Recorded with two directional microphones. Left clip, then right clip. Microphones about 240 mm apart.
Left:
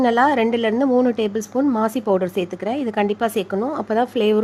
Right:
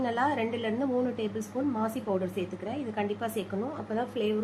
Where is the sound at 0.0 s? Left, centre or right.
Left.